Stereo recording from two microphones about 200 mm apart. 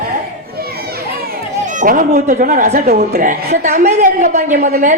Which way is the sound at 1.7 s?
40° right (ahead or behind).